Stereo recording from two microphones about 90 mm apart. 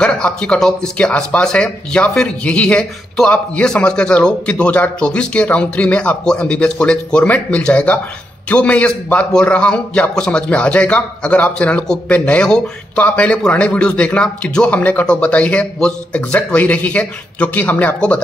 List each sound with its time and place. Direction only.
0.0 s a man's voice: 10° left (ahead or behind)